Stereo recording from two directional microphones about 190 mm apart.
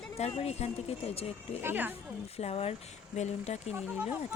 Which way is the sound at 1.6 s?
10° right (ahead or behind).